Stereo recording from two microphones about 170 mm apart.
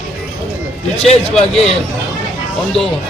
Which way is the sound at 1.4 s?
35° left (ahead or behind).